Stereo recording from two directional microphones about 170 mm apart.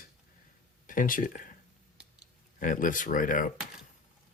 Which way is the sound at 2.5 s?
50° left (ahead or behind).